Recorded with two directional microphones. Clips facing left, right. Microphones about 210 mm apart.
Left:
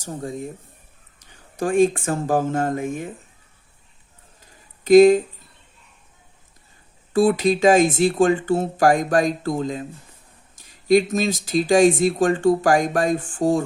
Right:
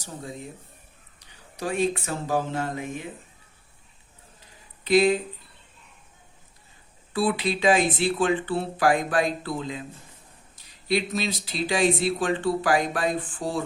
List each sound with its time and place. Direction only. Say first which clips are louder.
0.0 s speech: left 7 dB; 45° left (ahead or behind)
4.8 s speech: left 9 dB; 45° left (ahead or behind)
7.1 s speech: left 8 dB; 45° left (ahead or behind)